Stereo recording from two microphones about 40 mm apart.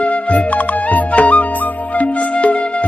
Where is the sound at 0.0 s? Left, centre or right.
Left.